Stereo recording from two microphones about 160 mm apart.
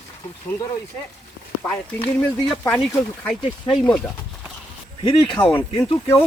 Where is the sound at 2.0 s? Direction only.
10° left (ahead or behind).